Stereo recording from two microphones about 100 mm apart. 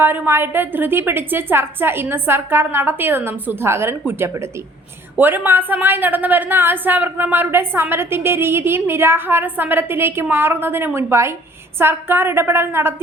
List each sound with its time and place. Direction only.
0.0 s a woman's voice: 20° right (ahead or behind)